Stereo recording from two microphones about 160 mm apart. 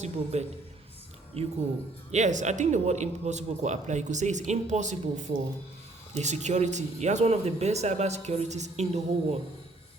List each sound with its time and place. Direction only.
0.0 s a man's voice: 45° right (ahead or behind)